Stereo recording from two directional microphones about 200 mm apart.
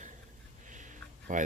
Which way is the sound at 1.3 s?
40° right (ahead or behind).